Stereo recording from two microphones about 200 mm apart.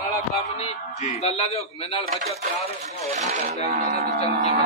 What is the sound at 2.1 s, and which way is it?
Speech, 40° right (ahead or behind).